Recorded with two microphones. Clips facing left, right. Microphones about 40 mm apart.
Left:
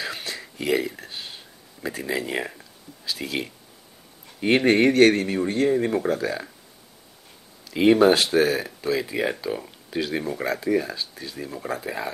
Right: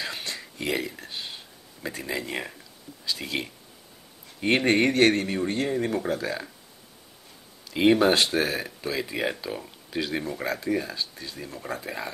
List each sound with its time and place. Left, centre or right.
0.0 s a sound: centre
1.8 s speech: centre
7.7 s speech: centre